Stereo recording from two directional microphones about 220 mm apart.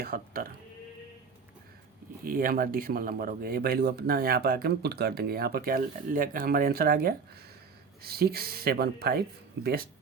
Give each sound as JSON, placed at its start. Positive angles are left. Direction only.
{"t": 0.0, "sound": "speech", "side_deg": -40}
{"t": 2.2, "sound": "speech", "side_deg": -40}